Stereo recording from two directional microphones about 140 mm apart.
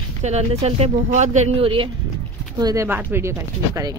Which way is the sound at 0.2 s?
50° right (ahead or behind).